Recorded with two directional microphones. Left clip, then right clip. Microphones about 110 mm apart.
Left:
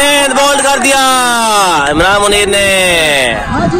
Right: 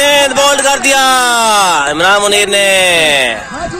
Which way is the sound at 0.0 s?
Centre (ahead or behind).